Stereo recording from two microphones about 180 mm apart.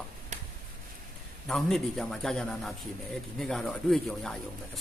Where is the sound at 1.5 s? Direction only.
Centre (ahead or behind).